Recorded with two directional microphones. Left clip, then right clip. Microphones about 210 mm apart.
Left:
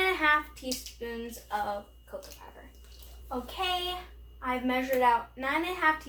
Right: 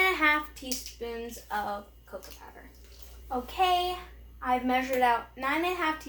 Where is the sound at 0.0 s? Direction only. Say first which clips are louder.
Right 1 dB; 30° right (ahead or behind).